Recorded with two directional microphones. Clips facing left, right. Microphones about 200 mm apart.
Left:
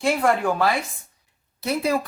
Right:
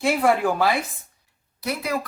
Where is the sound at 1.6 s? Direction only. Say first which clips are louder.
Left 4 dB; 25° left (ahead or behind).